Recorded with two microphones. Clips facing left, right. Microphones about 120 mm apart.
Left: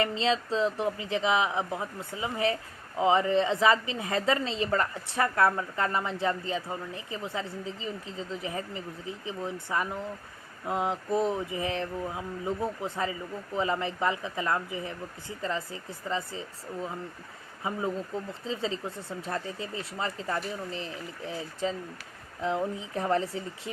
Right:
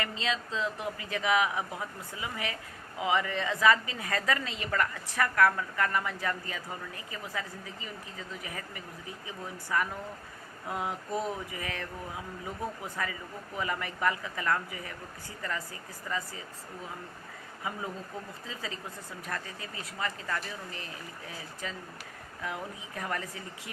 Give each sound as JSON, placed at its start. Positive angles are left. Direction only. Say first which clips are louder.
{"t": 0.0, "sound": "a woman's voice", "louder": "left 7 dB", "side_deg": 30}
{"t": 17.6, "sound": "a woman's voice", "louder": "left 6 dB", "side_deg": 25}